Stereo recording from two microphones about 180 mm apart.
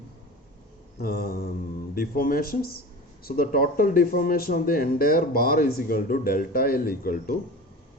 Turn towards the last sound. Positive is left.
turn(degrees=55)  # may be behind; listen again after turning